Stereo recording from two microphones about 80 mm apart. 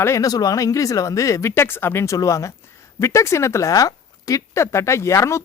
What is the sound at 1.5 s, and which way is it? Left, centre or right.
Speech, left.